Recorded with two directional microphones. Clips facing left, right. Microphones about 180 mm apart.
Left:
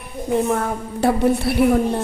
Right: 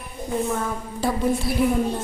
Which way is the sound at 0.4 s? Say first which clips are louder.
Left 5 dB; 65° left (ahead or behind).